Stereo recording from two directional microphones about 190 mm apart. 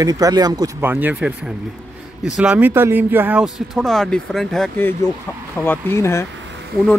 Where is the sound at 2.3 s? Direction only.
5° right (ahead or behind); by 6.2 s 15° left (ahead or behind).